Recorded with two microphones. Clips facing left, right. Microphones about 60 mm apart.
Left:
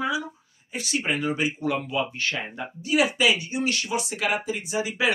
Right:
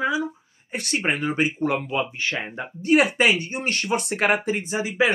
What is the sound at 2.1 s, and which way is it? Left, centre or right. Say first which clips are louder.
Speech: right 2 dB; right.